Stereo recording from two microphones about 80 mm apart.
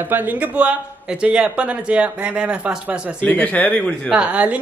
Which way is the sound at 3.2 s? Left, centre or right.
Centre.